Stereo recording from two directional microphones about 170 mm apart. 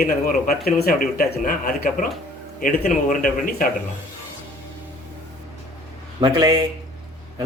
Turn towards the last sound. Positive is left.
turn(degrees=-25)  # may be behind; listen again after turning